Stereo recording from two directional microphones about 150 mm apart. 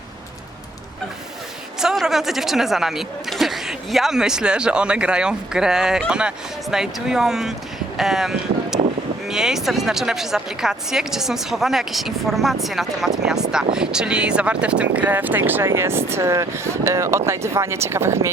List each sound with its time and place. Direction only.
1.8 s speech: 5° right (ahead or behind)